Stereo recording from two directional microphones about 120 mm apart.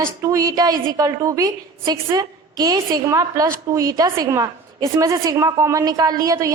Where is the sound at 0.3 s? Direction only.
30° right (ahead or behind).